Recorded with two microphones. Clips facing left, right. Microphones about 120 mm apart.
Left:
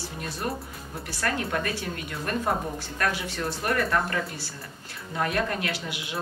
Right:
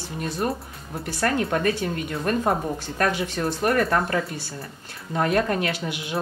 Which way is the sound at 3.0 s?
30° right (ahead or behind).